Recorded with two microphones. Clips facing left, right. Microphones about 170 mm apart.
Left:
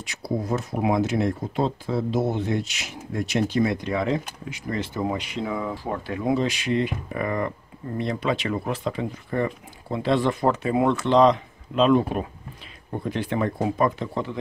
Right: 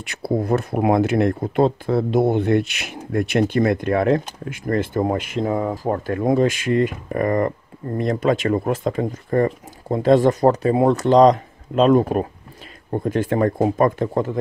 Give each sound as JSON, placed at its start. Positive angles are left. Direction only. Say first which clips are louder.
{"t": 0.0, "sound": "speech", "louder": "right 6 dB", "side_deg": -55}